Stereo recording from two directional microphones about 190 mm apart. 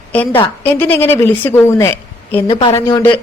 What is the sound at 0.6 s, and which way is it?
A woman's voice, 10° left (ahead or behind).